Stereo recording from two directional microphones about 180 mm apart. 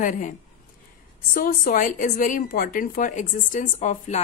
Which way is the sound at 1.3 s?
50° left (ahead or behind).